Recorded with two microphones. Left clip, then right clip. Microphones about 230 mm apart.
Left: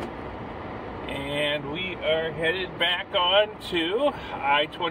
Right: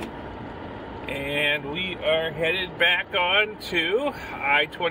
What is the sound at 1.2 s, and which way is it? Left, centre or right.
Speech, right.